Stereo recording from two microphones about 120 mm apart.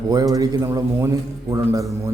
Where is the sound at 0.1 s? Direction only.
30° right (ahead or behind).